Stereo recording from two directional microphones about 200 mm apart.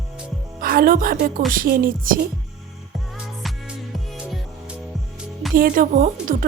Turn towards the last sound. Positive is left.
turn(degrees=-45)  # may be behind; listen again after turning